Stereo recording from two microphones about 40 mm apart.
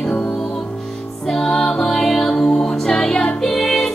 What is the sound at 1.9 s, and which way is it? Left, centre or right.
Music, centre.